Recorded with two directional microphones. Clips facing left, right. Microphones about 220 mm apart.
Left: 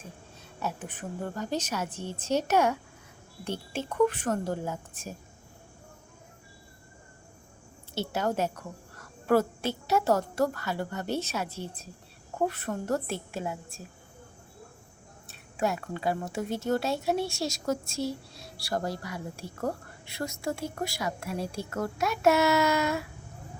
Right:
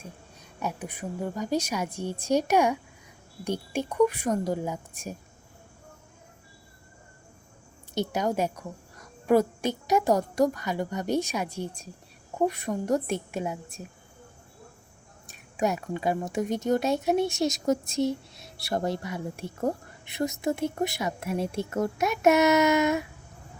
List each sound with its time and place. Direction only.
0.6 s a woman's voice: 10° right (ahead or behind)
7.9 s a woman's voice: 15° right (ahead or behind)
15.3 s speech: 15° right (ahead or behind)